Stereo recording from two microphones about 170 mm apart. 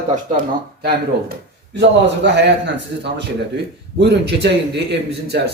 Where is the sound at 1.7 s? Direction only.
90° right.